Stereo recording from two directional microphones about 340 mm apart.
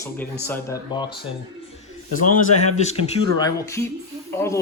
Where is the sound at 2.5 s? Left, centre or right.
Centre.